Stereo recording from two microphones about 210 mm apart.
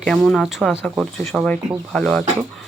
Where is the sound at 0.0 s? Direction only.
Centre (ahead or behind).